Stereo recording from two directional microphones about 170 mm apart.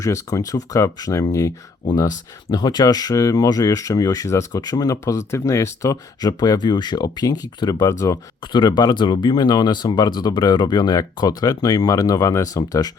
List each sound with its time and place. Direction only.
0.0 s speech: 20° left (ahead or behind)